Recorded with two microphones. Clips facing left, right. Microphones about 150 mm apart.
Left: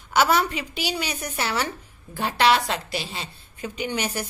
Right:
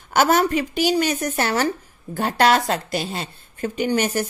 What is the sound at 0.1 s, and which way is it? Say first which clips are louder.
A woman's voice: right 4 dB; 50° right (ahead or behind).